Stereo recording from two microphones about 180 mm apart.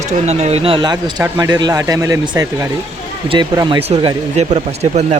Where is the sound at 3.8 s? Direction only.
35° right (ahead or behind).